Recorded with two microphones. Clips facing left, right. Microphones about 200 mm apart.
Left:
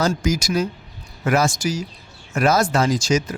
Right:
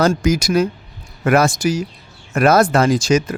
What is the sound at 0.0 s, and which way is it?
Speech, 60° right (ahead or behind).